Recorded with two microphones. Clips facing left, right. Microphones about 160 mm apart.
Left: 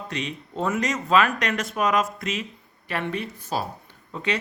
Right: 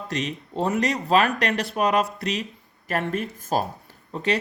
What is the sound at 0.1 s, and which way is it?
Speech, 40° right (ahead or behind).